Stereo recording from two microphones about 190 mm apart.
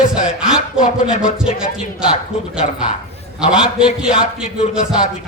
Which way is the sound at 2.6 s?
40° left (ahead or behind).